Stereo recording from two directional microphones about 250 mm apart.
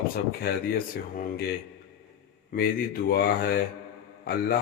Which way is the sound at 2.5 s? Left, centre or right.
Left.